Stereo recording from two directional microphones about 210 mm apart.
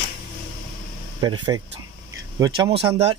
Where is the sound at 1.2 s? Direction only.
20° right (ahead or behind).